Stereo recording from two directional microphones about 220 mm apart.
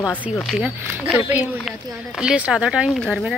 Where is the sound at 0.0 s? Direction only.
Centre (ahead or behind).